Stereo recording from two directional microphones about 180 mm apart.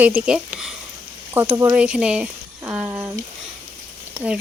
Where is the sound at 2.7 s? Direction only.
5° right (ahead or behind).